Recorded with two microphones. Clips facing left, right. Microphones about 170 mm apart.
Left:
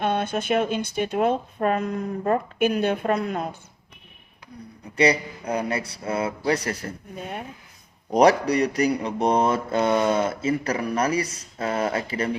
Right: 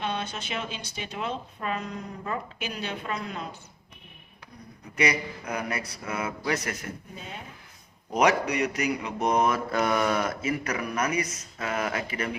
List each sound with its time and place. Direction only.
0.0 s speech: 55° left (ahead or behind)
4.9 s speech: 30° left (ahead or behind)
7.2 s speech: 60° left (ahead or behind)
8.1 s speech: 35° left (ahead or behind)